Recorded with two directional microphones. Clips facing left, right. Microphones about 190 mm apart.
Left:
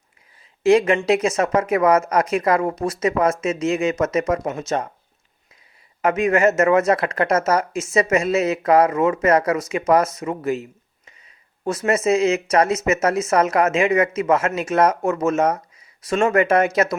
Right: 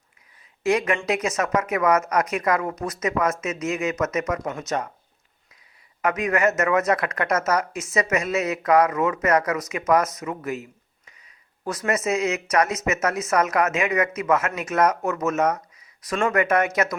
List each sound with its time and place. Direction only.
0.6 s speech: 25° left (ahead or behind)
6.0 s speech: 25° left (ahead or behind)